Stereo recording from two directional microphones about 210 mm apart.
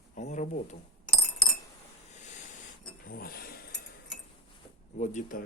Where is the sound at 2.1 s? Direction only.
35° left (ahead or behind).